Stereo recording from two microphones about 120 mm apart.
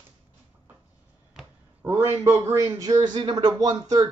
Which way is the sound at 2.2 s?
25° right (ahead or behind).